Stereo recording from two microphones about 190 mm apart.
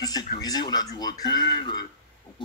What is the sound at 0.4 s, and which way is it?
A man's voice, 20° left (ahead or behind).